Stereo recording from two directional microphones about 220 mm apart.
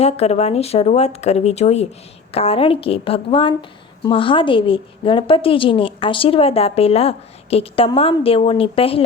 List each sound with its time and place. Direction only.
0.0 s a woman's voice: 30° left (ahead or behind)